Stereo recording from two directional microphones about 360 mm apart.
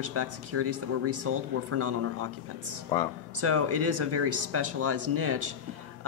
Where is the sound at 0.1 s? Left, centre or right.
Right.